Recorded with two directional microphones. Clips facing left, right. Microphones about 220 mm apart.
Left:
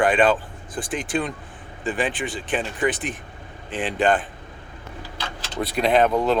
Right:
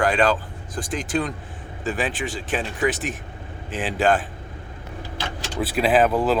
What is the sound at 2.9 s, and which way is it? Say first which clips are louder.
Speech: right 1 dB; 45° right (ahead or behind).